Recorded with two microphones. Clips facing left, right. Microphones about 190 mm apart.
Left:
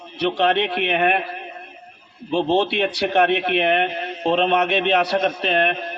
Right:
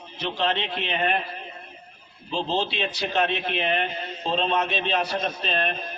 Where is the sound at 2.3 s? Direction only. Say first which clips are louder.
Left 8 dB; 60° left (ahead or behind).